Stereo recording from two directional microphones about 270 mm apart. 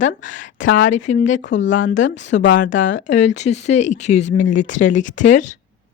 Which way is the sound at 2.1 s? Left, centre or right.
Left.